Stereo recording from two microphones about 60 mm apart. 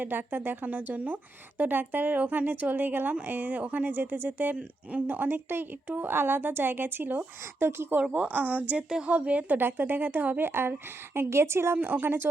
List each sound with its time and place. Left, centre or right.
0.0 s a woman's voice: right
4.5 s a woman's voice: right
8.1 s a woman's voice: right
11.8 s a woman's voice: right